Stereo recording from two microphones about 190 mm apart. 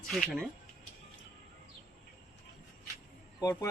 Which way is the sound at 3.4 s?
15° left (ahead or behind).